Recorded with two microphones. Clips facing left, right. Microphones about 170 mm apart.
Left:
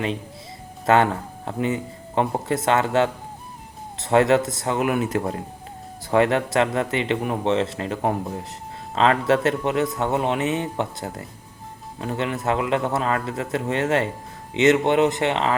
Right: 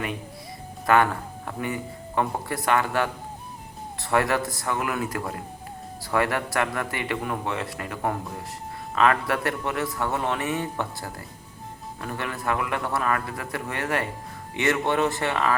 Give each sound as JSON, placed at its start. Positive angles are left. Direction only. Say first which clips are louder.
{"t": 0.9, "sound": "speech", "louder": "left 3 dB", "side_deg": 25}